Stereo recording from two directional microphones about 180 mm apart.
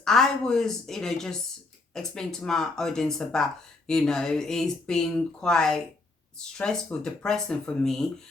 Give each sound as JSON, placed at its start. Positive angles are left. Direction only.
{"t": 0.0, "sound": "speech", "side_deg": 0}